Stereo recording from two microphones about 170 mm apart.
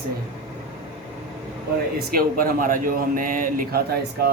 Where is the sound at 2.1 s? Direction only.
60° right (ahead or behind).